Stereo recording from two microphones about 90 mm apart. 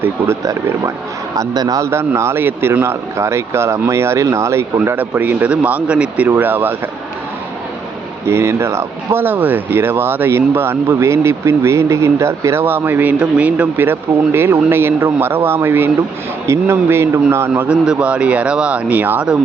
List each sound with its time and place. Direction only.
1.4 s a man's voice: 45° right (ahead or behind)
1.9 s speech: 30° right (ahead or behind)
4.9 s speech: 20° right (ahead or behind)
8.3 s speech: 30° right (ahead or behind)
17.5 s speech: 15° right (ahead or behind)